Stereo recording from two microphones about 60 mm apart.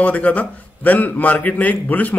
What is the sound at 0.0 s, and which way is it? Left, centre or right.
A man's voice, left.